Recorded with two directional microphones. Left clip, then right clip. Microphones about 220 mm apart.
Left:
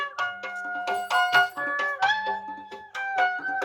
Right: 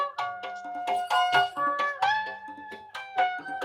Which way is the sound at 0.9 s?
20° right (ahead or behind).